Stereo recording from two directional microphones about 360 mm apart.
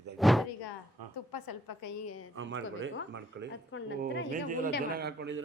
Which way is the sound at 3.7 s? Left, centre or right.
Left.